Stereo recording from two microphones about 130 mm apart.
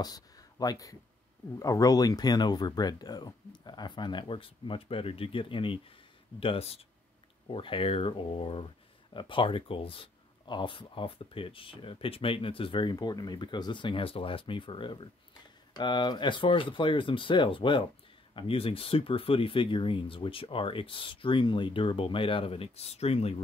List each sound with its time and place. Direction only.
0.0 s speech: 30° left (ahead or behind)
12.9 s speech: 30° left (ahead or behind); by 23.3 s 50° left (ahead or behind)